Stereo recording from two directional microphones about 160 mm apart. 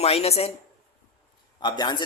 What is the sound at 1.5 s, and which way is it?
Speech, 25° left (ahead or behind).